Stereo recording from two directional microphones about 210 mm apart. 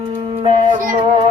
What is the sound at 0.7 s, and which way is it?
Music, 40° right (ahead or behind).